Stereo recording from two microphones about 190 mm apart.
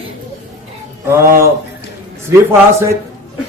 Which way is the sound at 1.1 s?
15° right (ahead or behind).